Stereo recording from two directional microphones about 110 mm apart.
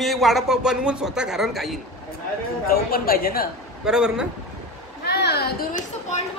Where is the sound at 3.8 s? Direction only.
5° right (ahead or behind).